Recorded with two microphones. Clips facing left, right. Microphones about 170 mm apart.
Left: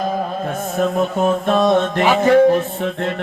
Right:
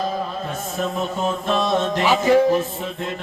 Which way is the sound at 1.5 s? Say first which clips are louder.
Left 4 dB; 55° left (ahead or behind).